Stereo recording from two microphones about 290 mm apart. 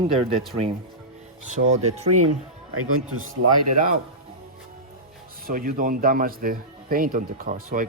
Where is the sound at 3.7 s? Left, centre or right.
Right.